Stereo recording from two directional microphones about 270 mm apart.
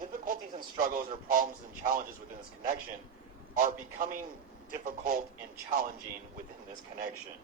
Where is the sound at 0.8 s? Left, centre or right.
Right.